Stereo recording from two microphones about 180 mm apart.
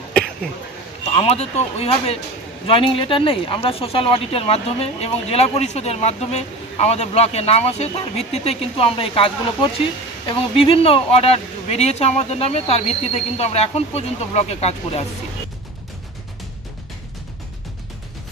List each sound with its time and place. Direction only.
1.1 s speech: 35° left (ahead or behind)